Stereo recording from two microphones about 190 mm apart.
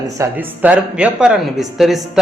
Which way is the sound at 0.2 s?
10° right (ahead or behind).